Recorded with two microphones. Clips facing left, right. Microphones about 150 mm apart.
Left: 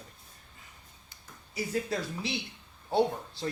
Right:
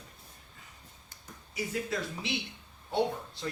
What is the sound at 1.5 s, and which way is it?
Speech, 35° left (ahead or behind).